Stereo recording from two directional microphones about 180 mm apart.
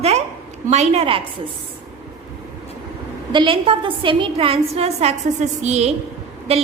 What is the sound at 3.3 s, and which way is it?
A woman's voice, 30° right (ahead or behind).